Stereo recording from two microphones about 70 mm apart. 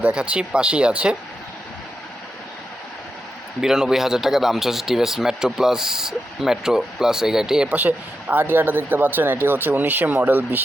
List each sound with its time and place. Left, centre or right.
0.0 s speech: centre
3.6 s speech: centre
7.7 s speech: right